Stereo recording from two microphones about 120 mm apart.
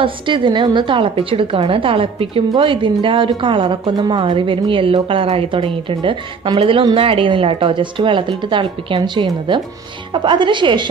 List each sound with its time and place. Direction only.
0.0 s a woman's voice: 45° right (ahead or behind)